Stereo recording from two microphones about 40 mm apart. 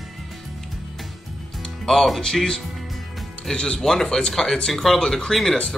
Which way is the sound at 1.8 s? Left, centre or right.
Centre.